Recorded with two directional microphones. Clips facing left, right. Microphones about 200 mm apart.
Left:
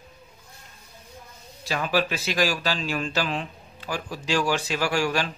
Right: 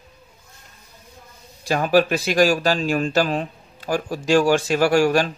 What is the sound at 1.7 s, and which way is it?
Speech, 45° right (ahead or behind).